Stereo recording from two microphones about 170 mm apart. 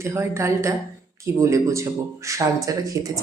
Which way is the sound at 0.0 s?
15° right (ahead or behind).